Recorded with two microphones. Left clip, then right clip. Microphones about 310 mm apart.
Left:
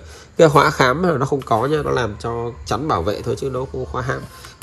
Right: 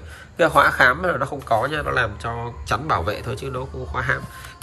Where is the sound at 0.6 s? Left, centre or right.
Left.